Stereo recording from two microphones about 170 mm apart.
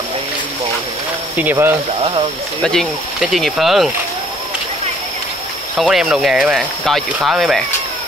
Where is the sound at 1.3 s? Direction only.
10° right (ahead or behind).